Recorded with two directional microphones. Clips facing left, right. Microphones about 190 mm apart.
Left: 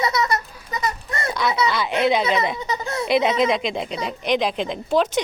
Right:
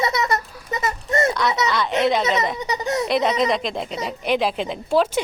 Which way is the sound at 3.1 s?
Centre (ahead or behind).